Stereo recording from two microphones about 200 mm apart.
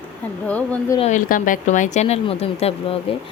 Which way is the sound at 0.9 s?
35° left (ahead or behind).